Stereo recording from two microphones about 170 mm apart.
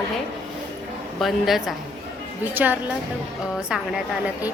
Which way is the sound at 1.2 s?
Centre (ahead or behind).